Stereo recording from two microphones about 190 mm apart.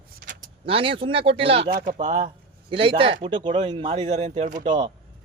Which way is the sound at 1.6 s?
45° right (ahead or behind).